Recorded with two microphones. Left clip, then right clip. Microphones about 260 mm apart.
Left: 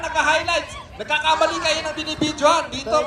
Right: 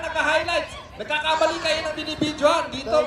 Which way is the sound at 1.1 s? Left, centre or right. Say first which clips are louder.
Left 3 dB; left.